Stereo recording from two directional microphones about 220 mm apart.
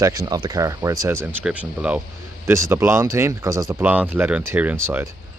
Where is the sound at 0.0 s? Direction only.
15° right (ahead or behind).